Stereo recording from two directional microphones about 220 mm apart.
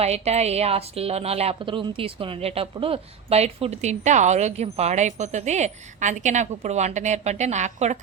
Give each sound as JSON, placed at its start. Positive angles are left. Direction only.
{"t": 0.0, "sound": "a woman's voice", "side_deg": -30}